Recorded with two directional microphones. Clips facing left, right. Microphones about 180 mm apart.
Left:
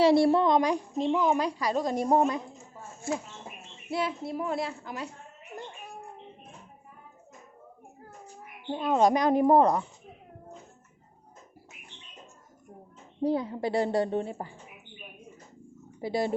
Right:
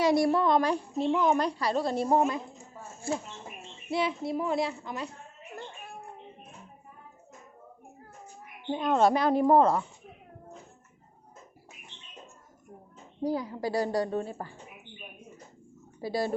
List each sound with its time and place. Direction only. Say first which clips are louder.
0.0 s a woman's voice: left 3 dB; 30° left (ahead or behind)
3.9 s a woman's voice: right 2 dB; centre (ahead or behind)
8.7 s a woman's voice: even; 5° left (ahead or behind)
13.2 s a woman's voice: left 3 dB; 25° left (ahead or behind)
16.0 s speech: left 1 dB; 20° left (ahead or behind)